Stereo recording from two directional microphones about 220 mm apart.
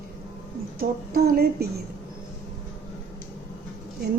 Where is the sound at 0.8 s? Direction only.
40° right (ahead or behind).